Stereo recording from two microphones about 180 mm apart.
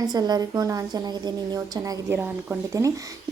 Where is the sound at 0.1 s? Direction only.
20° right (ahead or behind).